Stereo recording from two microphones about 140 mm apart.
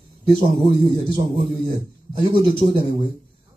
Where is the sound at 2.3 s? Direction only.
35° right (ahead or behind).